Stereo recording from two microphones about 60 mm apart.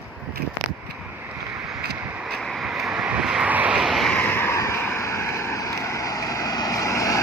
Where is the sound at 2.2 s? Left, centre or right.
Centre.